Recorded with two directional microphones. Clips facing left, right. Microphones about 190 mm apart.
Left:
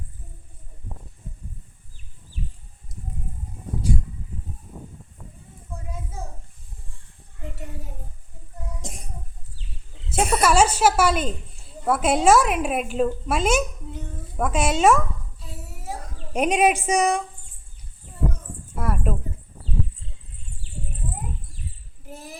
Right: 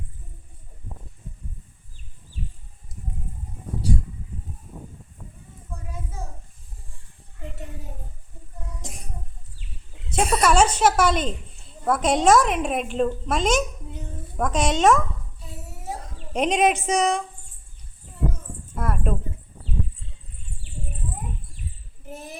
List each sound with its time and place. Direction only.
10.1 s a woman's voice: 5° left (ahead or behind)
15.4 s a sound: 20° right (ahead or behind)
16.1 s speech: 10° left (ahead or behind)
18.7 s dog: 5° left (ahead or behind)
22.1 s child singing: 20° right (ahead or behind)